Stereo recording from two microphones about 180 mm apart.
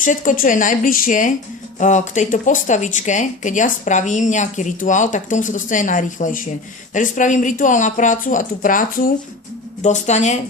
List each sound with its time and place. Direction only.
0.0 s speech: 45° left (ahead or behind)